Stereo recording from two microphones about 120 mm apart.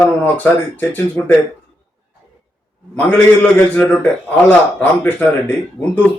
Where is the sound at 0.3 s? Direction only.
15° left (ahead or behind).